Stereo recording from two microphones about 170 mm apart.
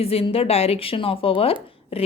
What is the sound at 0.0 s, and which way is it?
A woman's voice, 35° left (ahead or behind).